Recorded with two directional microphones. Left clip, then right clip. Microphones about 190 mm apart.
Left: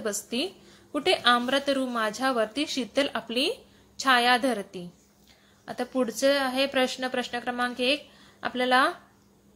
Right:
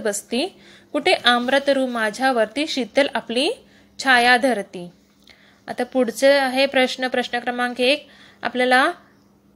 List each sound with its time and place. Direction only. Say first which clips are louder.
0.3 s a woman's voice: right 7 dB; 20° right (ahead or behind)